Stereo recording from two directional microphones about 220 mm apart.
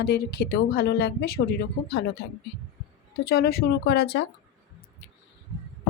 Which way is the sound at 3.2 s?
45° left (ahead or behind).